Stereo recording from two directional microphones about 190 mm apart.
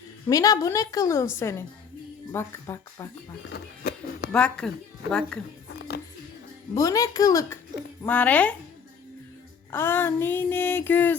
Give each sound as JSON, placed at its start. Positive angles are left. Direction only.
{"t": 0.3, "sound": "female singing", "side_deg": 20}
{"t": 3.5, "sound": "a sound", "side_deg": 55}
{"t": 4.3, "sound": "a woman's voice", "side_deg": 5}
{"t": 5.6, "sound": "music", "side_deg": 60}
{"t": 6.7, "sound": "female singing", "side_deg": 15}
{"t": 9.7, "sound": "female singing", "side_deg": 10}